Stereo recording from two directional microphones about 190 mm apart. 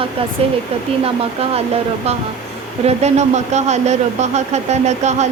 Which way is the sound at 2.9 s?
35° right (ahead or behind).